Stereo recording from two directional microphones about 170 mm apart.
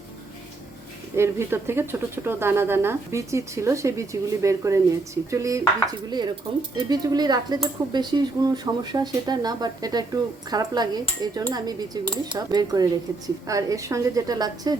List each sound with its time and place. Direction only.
1.1 s speech: 15° right (ahead or behind)